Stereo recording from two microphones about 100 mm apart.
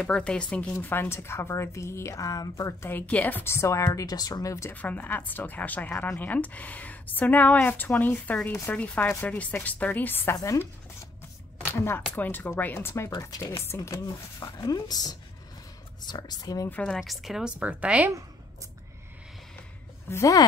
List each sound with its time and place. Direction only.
0.0 s speech: 10° left (ahead or behind); by 2.7 s 35° left (ahead or behind)
2.8 s speech: 20° left (ahead or behind)
3.8 s speech: 40° left (ahead or behind)
4.6 s a woman's voice: 15° left (ahead or behind)
10.3 s speech: 30° left (ahead or behind)
13.2 s speech: 35° left (ahead or behind)
16.6 s a woman's voice: 15° left (ahead or behind)
16.9 s speech: centre (ahead or behind)
20.1 s speech: 30° left (ahead or behind)